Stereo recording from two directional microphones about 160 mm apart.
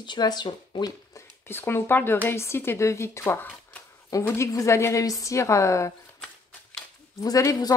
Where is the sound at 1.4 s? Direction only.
15° left (ahead or behind).